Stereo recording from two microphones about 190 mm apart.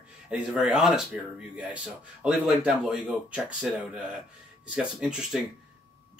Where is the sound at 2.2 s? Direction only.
5° right (ahead or behind).